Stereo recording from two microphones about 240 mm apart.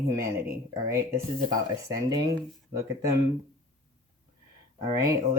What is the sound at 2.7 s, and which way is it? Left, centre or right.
Speech, centre.